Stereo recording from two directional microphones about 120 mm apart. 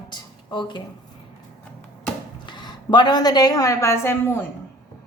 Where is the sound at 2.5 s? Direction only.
40° left (ahead or behind); by 4.4 s 20° left (ahead or behind).